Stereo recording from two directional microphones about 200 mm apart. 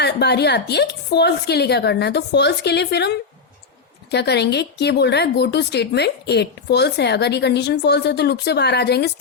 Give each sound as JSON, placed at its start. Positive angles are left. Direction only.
{"t": 0.0, "sound": "a woman's voice", "side_deg": 55}